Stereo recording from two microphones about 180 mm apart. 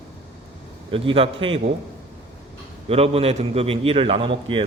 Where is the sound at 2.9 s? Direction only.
35° right (ahead or behind).